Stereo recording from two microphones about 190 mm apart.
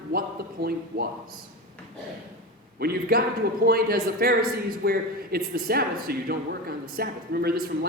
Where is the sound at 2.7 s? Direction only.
55° right (ahead or behind).